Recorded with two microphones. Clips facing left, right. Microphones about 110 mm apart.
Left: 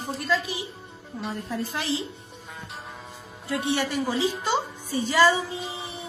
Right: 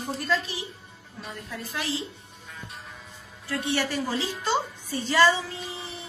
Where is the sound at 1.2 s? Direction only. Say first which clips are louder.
Left 7 dB; 35° left (ahead or behind).